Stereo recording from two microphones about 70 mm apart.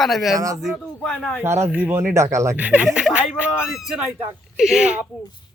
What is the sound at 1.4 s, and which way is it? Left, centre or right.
Speech, right.